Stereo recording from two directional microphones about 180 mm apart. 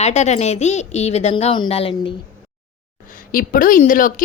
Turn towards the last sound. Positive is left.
turn(degrees=50)  # may be behind; listen again after turning